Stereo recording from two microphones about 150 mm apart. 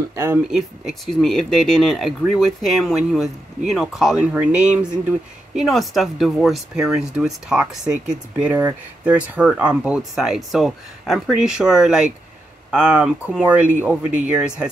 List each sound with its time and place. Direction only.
0.1 s speech: 15° right (ahead or behind)
0.5 s speech: centre (ahead or behind)